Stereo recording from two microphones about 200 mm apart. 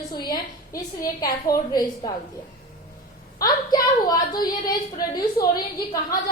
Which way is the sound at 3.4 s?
20° left (ahead or behind).